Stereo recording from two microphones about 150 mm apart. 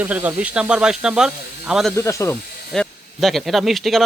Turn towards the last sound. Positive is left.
turn(degrees=0)  # may be behind; listen again after turning